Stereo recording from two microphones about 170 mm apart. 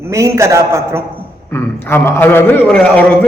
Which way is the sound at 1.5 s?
15° left (ahead or behind).